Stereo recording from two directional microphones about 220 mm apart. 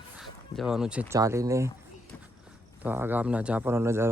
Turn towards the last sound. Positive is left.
turn(degrees=-10)  # may be behind; listen again after turning